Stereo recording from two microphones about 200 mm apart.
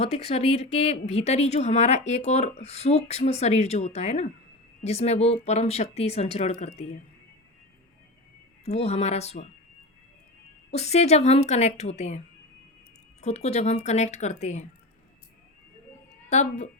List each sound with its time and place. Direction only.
0.0 s speech: 35° left (ahead or behind)
8.6 s speech: 30° left (ahead or behind)
10.7 s speech: 35° left (ahead or behind)
13.2 s speech: 30° left (ahead or behind)
16.3 s speech: 35° left (ahead or behind)